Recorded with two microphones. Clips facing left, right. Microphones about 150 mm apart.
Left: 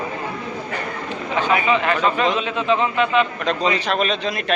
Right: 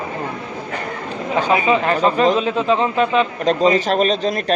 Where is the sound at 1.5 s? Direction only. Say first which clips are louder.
Right 2 dB; 35° right (ahead or behind).